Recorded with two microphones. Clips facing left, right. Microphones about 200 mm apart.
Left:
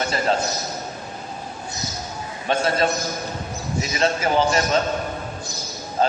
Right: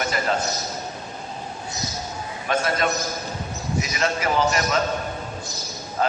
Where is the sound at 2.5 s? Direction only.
30° left (ahead or behind).